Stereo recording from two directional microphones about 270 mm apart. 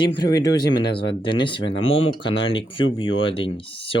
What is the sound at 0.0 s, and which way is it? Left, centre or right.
Speech, centre.